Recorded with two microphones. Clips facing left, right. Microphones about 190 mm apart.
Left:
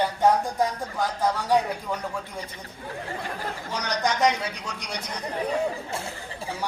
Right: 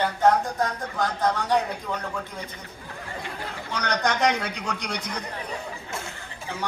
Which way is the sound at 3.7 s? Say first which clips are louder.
Right 1 dB; 60° right (ahead or behind).